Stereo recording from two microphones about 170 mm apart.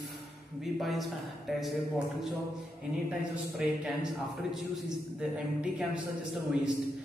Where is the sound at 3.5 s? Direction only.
5° right (ahead or behind).